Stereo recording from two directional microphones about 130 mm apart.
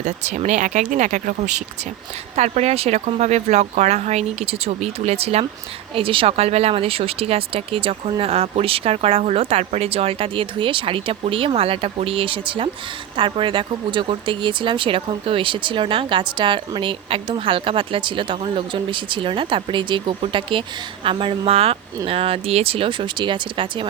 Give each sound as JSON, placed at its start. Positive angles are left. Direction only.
{"t": 0.0, "sound": "speech", "side_deg": -65}